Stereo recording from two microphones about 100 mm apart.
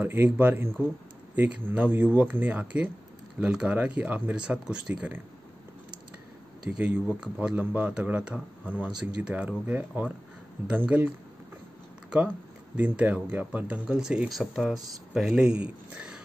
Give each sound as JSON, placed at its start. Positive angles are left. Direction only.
{"t": 0.0, "sound": "speech", "side_deg": -20}
{"t": 6.6, "sound": "speech", "side_deg": -10}
{"t": 12.7, "sound": "speech", "side_deg": -15}